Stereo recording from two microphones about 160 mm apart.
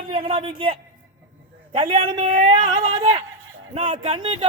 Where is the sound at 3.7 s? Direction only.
45° right (ahead or behind).